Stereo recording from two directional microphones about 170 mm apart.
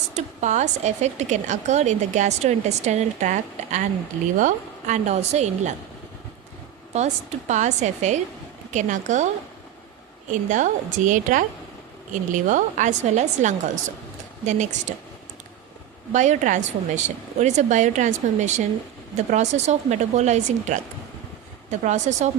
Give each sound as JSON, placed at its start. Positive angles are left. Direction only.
{"t": 0.1, "sound": "a woman's voice", "side_deg": -40}
{"t": 6.9, "sound": "a woman's voice", "side_deg": -40}
{"t": 10.5, "sound": "a woman's voice", "side_deg": -50}
{"t": 16.1, "sound": "a woman's voice", "side_deg": -45}